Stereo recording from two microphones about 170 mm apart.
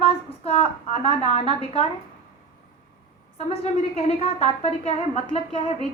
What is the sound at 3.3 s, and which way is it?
A woman's voice, 40° left (ahead or behind).